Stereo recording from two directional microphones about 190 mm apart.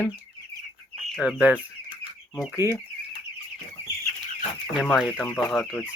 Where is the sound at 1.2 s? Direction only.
5° right (ahead or behind).